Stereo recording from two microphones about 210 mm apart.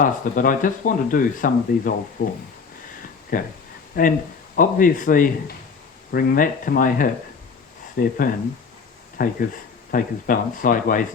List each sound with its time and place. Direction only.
0.0 s speech: 40° left (ahead or behind)
9.2 s speech: 45° left (ahead or behind)